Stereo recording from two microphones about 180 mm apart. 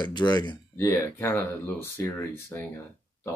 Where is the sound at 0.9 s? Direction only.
10° left (ahead or behind).